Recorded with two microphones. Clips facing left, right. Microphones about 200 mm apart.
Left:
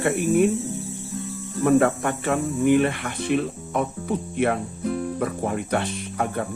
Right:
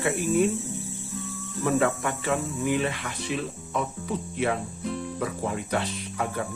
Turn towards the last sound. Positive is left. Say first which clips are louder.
# left 4 dB
turn(degrees=55)  # may be behind; listen again after turning